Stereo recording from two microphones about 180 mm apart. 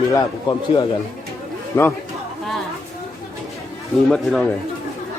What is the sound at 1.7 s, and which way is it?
Speech, 15° left (ahead or behind).